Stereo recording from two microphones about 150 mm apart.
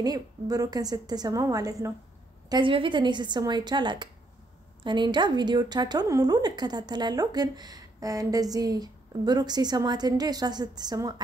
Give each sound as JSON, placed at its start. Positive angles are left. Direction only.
{"t": 0.0, "sound": "speech", "side_deg": -25}
{"t": 2.5, "sound": "a woman's voice", "side_deg": -35}